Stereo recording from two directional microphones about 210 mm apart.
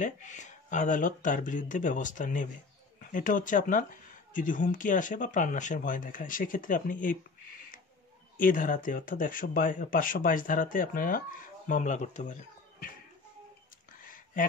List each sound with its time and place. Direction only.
0.0 s speech: 35° left (ahead or behind)
8.4 s speech: 40° left (ahead or behind)
14.0 s a sound: 40° left (ahead or behind)